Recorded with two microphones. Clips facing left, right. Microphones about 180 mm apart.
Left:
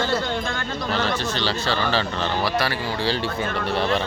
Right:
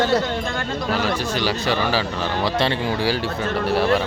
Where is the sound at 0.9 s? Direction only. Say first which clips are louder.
Right 1 dB; 10° right (ahead or behind).